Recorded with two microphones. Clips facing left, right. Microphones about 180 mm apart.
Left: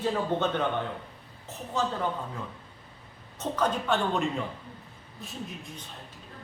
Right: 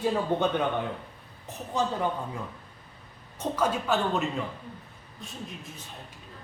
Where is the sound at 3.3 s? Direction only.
10° right (ahead or behind).